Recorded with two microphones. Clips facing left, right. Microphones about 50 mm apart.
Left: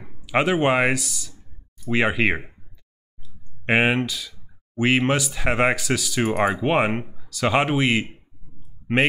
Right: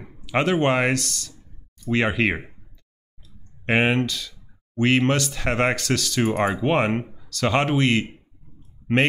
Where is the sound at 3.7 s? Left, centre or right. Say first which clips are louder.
Left 1 dB; centre.